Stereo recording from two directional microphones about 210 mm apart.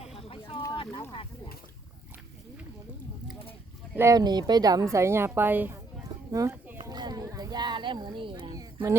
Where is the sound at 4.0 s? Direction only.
15° right (ahead or behind).